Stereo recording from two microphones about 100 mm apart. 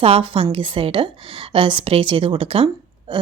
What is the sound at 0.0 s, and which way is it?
A woman's voice, 70° right (ahead or behind).